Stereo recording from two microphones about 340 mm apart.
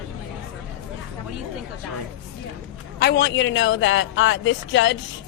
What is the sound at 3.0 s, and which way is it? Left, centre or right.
A man's voice, left.